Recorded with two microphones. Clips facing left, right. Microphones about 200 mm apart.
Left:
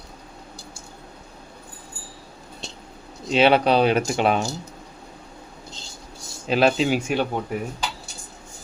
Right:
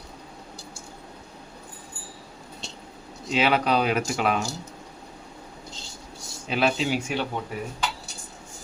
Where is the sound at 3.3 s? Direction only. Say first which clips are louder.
Left 5 dB; 30° left (ahead or behind).